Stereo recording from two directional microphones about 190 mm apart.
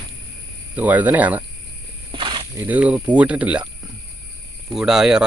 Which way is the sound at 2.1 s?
25° right (ahead or behind).